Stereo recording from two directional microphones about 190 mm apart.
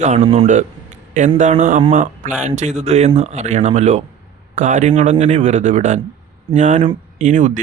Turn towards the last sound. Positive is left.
turn(degrees=-45)  # may be behind; listen again after turning